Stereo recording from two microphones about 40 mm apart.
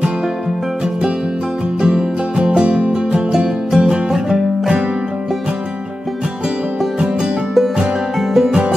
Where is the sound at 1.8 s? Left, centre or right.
Centre.